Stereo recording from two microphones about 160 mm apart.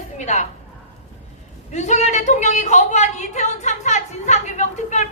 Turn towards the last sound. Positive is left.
turn(degrees=45)  # may be behind; listen again after turning